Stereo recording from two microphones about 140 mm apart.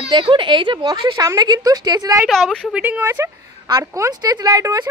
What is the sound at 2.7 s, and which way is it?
A woman's voice, 10° right (ahead or behind).